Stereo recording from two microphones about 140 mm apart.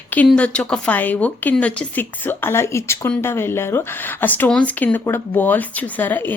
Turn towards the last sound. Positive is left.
turn(degrees=15)  # may be behind; listen again after turning